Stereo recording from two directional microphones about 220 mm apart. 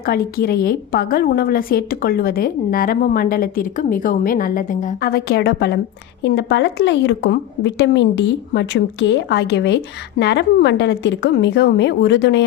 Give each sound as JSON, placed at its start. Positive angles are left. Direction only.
{"t": 0.0, "sound": "a woman's voice", "side_deg": 45}